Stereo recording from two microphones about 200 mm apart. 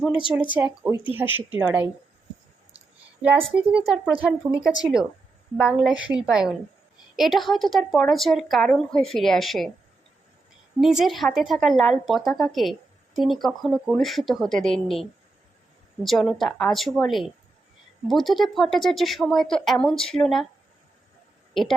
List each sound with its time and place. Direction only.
0.1 s speech: 25° left (ahead or behind)
0.5 s speech: 5° right (ahead or behind)
2.7 s a sound: 5° right (ahead or behind)
3.7 s a woman's voice: 5° right (ahead or behind)
11.0 s a woman's voice: centre (ahead or behind)
16.0 s a woman's voice: centre (ahead or behind)
21.5 s a woman's voice: centre (ahead or behind)